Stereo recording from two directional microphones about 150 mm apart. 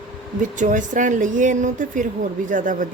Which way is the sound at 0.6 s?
55° right (ahead or behind).